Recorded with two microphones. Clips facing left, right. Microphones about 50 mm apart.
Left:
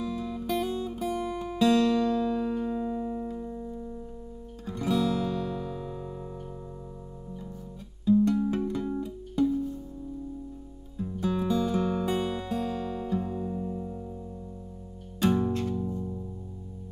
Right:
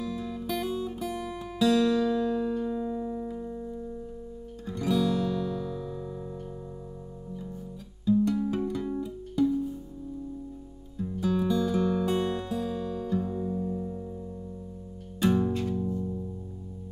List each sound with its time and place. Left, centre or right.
0.0 s music: centre
0.5 s guitar: centre
2.0 s music: centre
3.3 s music: centre
4.7 s guitar: centre
8.1 s music: centre
11.0 s music: centre
13.2 s music: left
15.1 s music: centre